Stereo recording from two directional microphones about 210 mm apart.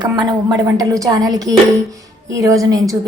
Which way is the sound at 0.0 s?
20° right (ahead or behind).